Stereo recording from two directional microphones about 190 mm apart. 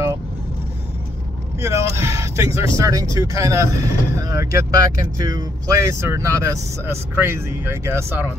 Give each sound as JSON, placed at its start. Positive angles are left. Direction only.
{"t": 1.6, "sound": "speech", "side_deg": -15}